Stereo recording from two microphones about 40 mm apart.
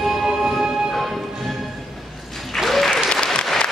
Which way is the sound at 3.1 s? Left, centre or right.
Left.